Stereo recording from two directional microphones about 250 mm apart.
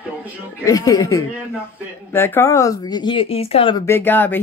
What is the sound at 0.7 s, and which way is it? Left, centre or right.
Speech, centre.